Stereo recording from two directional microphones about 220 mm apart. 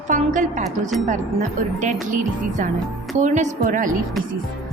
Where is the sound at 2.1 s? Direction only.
35° right (ahead or behind).